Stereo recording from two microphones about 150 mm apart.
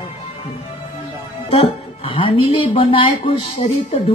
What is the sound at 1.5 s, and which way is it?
Speech, 35° left (ahead or behind).